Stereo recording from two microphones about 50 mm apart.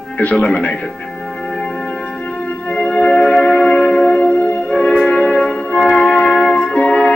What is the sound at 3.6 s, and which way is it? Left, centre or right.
Music, left.